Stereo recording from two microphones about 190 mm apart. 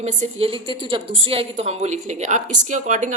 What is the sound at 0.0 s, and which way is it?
A woman's voice, 35° right (ahead or behind).